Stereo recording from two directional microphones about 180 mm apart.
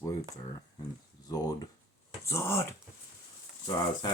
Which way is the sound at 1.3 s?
20° left (ahead or behind).